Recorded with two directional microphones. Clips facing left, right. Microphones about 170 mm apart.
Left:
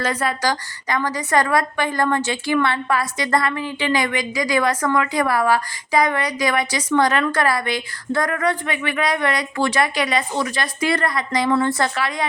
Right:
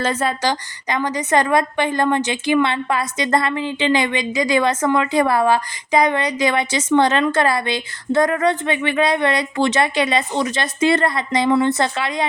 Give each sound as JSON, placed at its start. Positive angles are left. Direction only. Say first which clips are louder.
{"t": 0.0, "sound": "a woman's voice", "louder": "right 2 dB", "side_deg": -25}